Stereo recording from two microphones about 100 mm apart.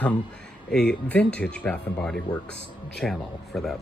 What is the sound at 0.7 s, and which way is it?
A man's voice, 10° left (ahead or behind).